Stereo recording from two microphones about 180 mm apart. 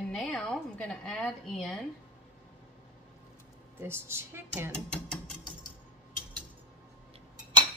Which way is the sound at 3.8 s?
15° right (ahead or behind).